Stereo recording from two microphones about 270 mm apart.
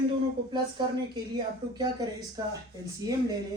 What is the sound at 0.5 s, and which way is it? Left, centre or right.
Speech, centre.